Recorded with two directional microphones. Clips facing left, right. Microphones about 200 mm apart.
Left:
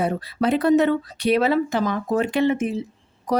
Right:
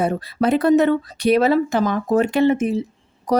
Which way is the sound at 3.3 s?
40° right (ahead or behind).